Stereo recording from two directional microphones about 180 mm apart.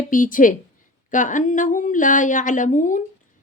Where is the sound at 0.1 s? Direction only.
50° left (ahead or behind).